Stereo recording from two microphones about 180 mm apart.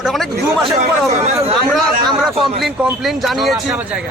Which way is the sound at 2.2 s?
Centre (ahead or behind).